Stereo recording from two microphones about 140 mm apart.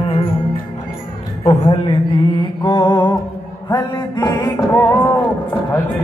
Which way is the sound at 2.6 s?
35° left (ahead or behind).